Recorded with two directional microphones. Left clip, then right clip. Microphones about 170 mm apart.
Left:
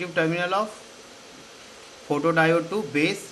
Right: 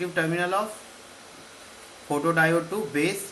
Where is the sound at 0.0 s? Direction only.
40° left (ahead or behind).